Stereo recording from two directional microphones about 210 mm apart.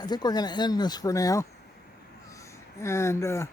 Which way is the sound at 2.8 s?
15° left (ahead or behind).